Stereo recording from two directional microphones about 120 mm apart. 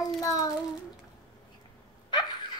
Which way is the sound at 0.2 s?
30° left (ahead or behind).